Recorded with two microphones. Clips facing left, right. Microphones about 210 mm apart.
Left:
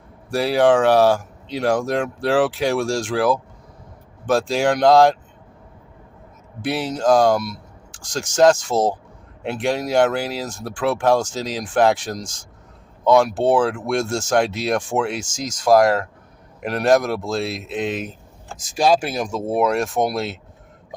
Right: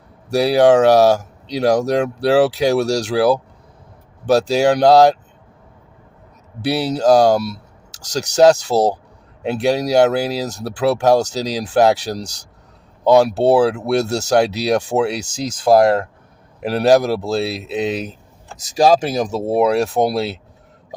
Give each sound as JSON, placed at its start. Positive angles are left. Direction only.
{"t": 0.3, "sound": "speech", "side_deg": -40}
{"t": 6.7, "sound": "speech", "side_deg": -35}